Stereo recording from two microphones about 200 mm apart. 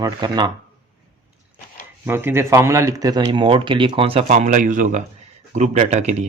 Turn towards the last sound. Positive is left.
turn(degrees=-35)  # may be behind; listen again after turning